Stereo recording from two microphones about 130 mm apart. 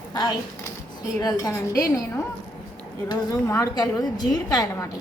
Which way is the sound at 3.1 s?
25° left (ahead or behind).